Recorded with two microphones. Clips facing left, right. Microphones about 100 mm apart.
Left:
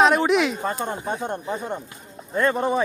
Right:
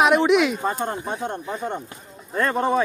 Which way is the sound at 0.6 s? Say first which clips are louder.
Right 2 dB; 10° right (ahead or behind).